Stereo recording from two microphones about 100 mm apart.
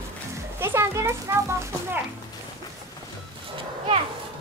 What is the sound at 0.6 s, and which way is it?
A child's voice, 25° right (ahead or behind).